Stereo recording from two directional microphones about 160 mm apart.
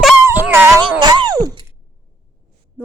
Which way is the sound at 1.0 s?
30° right (ahead or behind).